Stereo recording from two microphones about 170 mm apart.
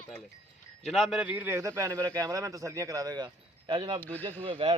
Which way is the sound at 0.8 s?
Centre (ahead or behind).